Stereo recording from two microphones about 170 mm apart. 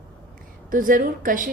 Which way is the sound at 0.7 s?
55° right (ahead or behind).